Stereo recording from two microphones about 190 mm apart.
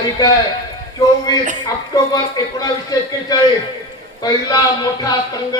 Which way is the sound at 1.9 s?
20° left (ahead or behind).